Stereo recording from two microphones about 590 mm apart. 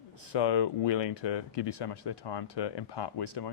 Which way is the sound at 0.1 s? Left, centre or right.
Left.